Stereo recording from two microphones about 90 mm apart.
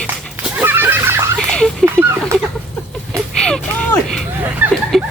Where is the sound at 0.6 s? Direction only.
20° right (ahead or behind).